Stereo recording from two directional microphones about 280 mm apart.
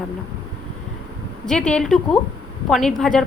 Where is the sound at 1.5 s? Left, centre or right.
Centre.